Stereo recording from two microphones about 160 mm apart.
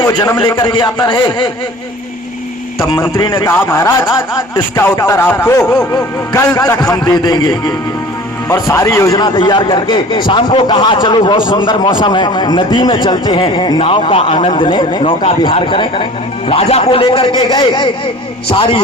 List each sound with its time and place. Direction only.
0.3 s a man's voice: 30° left (ahead or behind)
2.7 s speech: centre (ahead or behind)
3.4 s a man's voice: 15° left (ahead or behind); by 17.1 s 40° left (ahead or behind)
17.2 s a man's voice: 25° left (ahead or behind)